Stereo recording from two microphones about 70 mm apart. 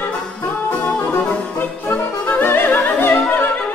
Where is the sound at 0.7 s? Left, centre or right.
Left.